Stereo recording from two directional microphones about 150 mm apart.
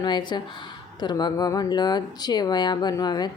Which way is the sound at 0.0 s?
30° left (ahead or behind).